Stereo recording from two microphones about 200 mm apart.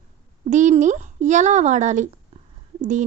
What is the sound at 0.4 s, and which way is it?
A woman's voice, 35° right (ahead or behind).